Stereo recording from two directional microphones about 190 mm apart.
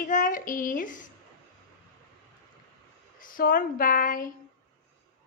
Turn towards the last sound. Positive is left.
turn(degrees=45)  # may be behind; listen again after turning